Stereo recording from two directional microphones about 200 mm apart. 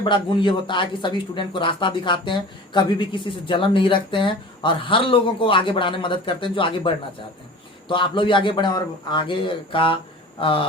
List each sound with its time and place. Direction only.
0.0 s speech: 25° left (ahead or behind)